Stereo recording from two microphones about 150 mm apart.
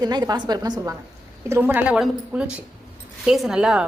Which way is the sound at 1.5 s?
15° right (ahead or behind).